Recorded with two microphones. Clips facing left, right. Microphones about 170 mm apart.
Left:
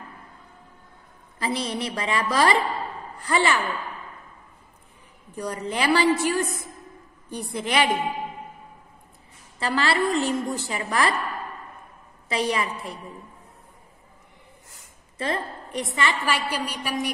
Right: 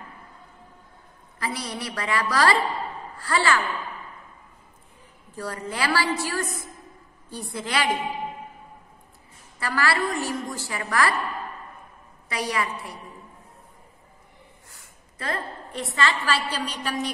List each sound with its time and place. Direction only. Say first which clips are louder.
1.4 s a woman's voice: left 4 dB; 25° left (ahead or behind)
5.3 s a woman's voice: left 3 dB; 20° left (ahead or behind)
9.6 s a woman's voice: left 2 dB; 25° left (ahead or behind)
12.3 s a woman's voice: left 3 dB; 25° left (ahead or behind)
14.7 s a woman's voice: even; 20° left (ahead or behind)